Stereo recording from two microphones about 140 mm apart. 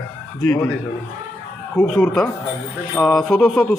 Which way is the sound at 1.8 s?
5° left (ahead or behind).